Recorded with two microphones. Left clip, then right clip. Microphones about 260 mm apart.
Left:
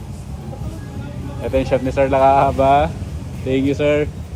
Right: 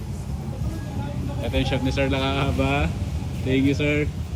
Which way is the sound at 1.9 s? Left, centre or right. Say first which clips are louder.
Left 15 dB; centre.